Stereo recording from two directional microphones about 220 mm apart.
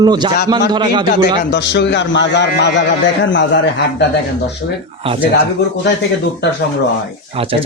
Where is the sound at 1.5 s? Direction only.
50° left (ahead or behind).